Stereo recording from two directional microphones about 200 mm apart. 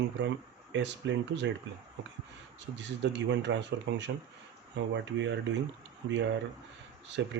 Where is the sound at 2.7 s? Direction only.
60° right (ahead or behind).